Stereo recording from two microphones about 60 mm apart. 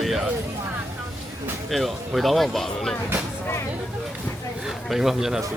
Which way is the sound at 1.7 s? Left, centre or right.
Centre.